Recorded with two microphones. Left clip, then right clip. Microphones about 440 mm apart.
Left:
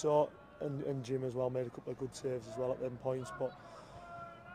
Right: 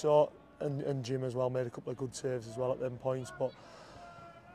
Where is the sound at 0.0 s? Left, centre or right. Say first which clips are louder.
Right 4 dB; right.